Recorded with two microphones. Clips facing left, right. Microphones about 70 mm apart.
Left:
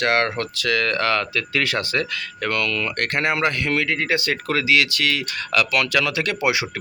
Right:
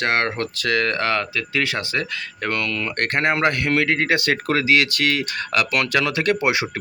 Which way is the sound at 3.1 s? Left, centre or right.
Right.